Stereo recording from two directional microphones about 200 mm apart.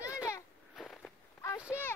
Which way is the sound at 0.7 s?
Centre (ahead or behind).